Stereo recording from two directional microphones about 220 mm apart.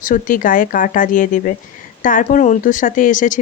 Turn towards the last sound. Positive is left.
turn(degrees=35)  # may be behind; listen again after turning